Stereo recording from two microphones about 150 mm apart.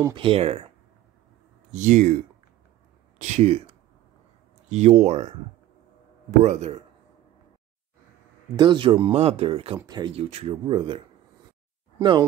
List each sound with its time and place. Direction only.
0.1 s speech: 35° right (ahead or behind)
1.7 s speech: 55° right (ahead or behind)
6.4 s speech: 50° right (ahead or behind)
8.5 s speech: 35° right (ahead or behind)
9.8 s speech: 30° right (ahead or behind)
10.1 s speech: 40° right (ahead or behind)
12.0 s speech: 30° right (ahead or behind)